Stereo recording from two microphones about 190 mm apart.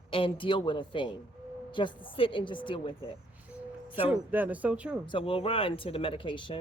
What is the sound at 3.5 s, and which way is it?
Music, 5° right (ahead or behind).